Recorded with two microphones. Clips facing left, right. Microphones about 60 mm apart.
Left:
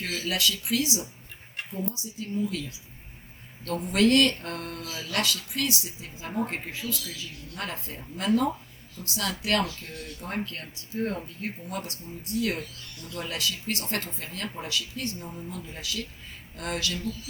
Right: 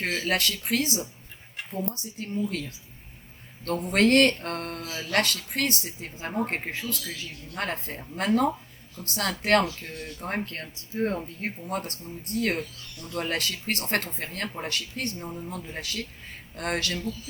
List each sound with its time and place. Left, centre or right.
0.0 s speech: right